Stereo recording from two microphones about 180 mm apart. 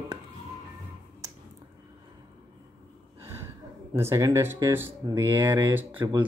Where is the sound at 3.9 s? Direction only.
15° right (ahead or behind).